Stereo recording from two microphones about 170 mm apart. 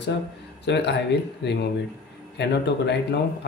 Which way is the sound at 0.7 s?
90° left.